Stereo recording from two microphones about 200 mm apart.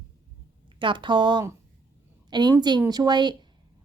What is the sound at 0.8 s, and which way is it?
A woman's voice, 25° right (ahead or behind).